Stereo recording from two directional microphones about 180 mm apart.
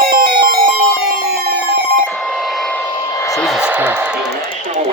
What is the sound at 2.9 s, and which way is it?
Vehicle, 20° left (ahead or behind).